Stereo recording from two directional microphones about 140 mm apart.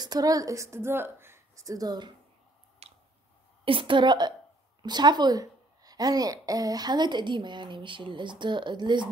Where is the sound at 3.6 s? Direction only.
40° right (ahead or behind).